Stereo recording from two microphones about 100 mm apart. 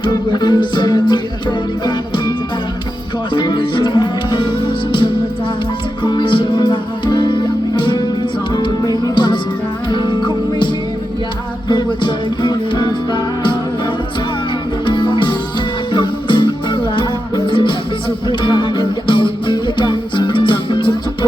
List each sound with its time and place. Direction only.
0.0 s music: 50° left (ahead or behind)
3.3 s music: 50° left (ahead or behind)
6.0 s music: 50° left (ahead or behind)
11.7 s music: 50° left (ahead or behind)
14.8 s music: 55° left (ahead or behind)